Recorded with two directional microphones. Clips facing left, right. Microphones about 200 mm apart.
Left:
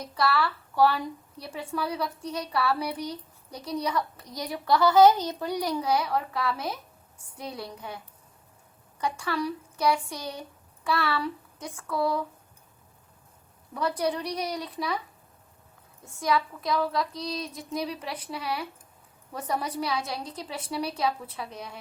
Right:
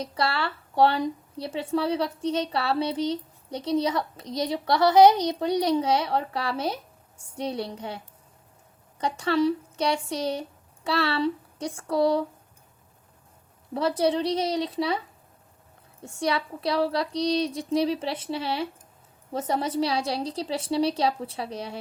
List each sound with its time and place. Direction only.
0.0 s a woman's voice: 25° right (ahead or behind)
13.7 s a woman's voice: 25° right (ahead or behind)